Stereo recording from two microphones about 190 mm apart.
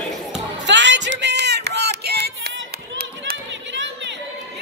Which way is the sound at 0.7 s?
70° right (ahead or behind).